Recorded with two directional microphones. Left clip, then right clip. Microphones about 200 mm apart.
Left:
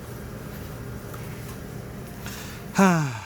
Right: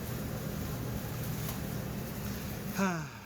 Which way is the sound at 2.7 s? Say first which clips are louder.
Left 14 dB; 65° left (ahead or behind).